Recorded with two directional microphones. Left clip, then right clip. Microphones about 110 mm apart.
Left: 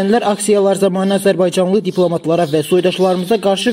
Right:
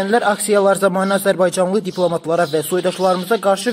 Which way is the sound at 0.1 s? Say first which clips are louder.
Even; 30° left (ahead or behind).